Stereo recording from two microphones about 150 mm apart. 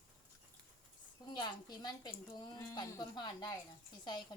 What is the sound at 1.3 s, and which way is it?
Speech, 30° left (ahead or behind).